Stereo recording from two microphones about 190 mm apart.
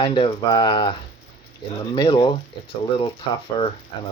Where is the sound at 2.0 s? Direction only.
25° left (ahead or behind).